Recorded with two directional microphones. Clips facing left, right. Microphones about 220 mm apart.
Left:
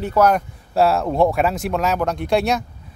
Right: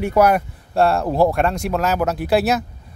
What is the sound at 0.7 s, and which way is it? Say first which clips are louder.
Speech: even; centre (ahead or behind).